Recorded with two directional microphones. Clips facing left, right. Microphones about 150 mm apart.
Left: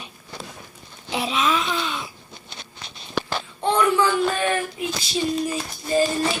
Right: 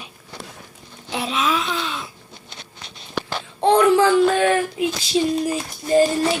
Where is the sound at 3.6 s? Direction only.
70° right (ahead or behind).